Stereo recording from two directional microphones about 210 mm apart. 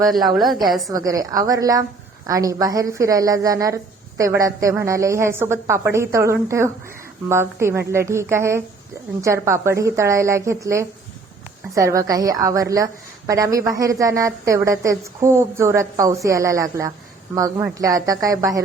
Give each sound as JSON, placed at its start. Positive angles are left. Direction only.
{"t": 0.9, "sound": "a woman's voice", "side_deg": -15}